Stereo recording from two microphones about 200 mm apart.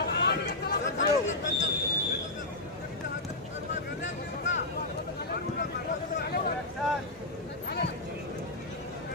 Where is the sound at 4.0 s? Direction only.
65° left (ahead or behind).